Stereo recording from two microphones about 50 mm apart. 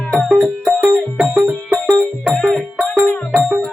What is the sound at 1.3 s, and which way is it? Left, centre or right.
Music, right.